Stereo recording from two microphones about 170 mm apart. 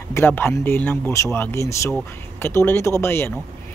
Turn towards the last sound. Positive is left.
turn(degrees=15)  # may be behind; listen again after turning